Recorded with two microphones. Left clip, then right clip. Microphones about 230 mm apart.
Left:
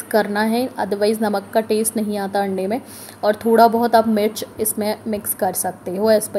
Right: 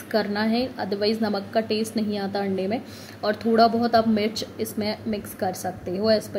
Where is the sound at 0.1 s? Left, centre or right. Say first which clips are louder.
Left 6 dB; left.